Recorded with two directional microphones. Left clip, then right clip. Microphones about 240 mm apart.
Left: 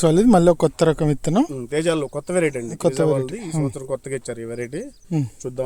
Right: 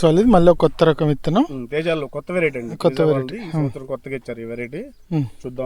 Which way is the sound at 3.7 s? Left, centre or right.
Left.